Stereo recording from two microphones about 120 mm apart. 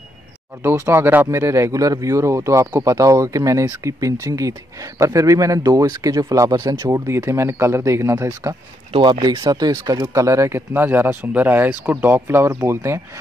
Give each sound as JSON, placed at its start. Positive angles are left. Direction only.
{"t": 0.6, "sound": "speech", "side_deg": -20}
{"t": 7.1, "sound": "speech", "side_deg": -20}
{"t": 8.9, "sound": "speech", "side_deg": -50}
{"t": 9.2, "sound": "speech", "side_deg": -35}